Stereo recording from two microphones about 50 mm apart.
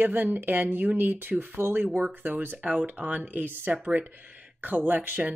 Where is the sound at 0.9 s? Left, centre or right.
Right.